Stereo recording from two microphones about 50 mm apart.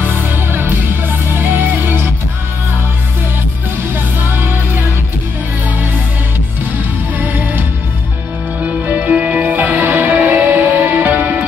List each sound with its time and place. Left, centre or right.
0.0 s music: right
4.2 s music: right
7.2 s music: right
8.6 s music: right